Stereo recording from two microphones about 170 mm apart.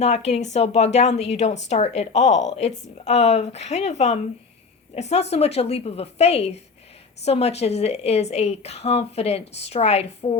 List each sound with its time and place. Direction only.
0.0 s a woman's voice: 40° left (ahead or behind)